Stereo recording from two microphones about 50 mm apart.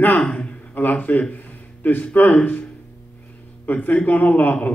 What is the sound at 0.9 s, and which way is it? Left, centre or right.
A man's voice, left.